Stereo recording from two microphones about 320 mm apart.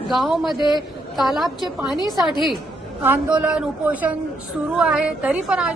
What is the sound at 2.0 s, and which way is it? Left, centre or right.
Speech, centre.